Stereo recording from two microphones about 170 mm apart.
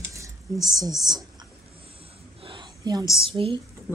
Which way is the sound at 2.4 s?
30° right (ahead or behind).